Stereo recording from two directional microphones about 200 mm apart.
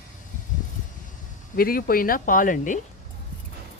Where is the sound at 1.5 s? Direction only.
45° left (ahead or behind).